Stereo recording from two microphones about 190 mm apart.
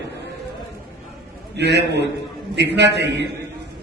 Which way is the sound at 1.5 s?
65° right (ahead or behind).